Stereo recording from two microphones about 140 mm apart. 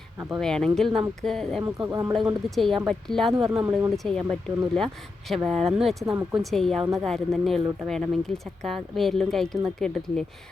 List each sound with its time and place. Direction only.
0.3 s speech: 5° left (ahead or behind)
1.6 s speech: 25° right (ahead or behind)
2.1 s speech: centre (ahead or behind)
3.7 s speech: 10° right (ahead or behind)
3.9 s speech: centre (ahead or behind)